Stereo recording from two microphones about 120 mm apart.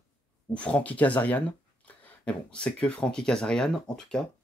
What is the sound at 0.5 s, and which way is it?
Speech, 10° left (ahead or behind).